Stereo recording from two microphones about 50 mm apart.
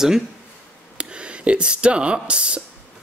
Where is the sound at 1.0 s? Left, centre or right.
Right.